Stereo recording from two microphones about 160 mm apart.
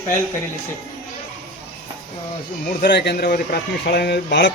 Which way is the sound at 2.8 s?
90° left.